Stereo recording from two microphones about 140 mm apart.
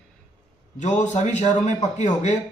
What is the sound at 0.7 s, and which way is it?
A man's voice, 55° left (ahead or behind).